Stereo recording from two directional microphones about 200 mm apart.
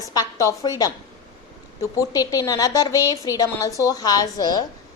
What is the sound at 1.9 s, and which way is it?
A woman's voice, 15° left (ahead or behind).